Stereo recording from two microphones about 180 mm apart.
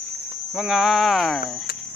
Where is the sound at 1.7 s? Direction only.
60° left (ahead or behind).